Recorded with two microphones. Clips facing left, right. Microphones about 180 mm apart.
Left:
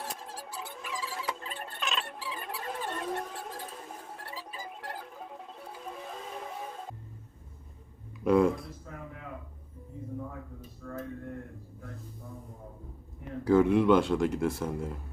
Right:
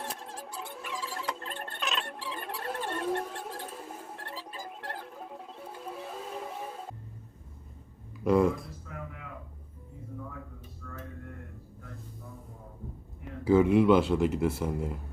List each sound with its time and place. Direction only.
0.0 s a sound: 5° left (ahead or behind)
8.2 s speech: centre (ahead or behind)
10.8 s mantra: 35° left (ahead or behind)
13.4 s speech: 5° right (ahead or behind)